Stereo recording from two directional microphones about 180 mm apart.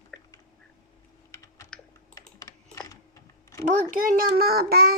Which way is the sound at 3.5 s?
15° left (ahead or behind).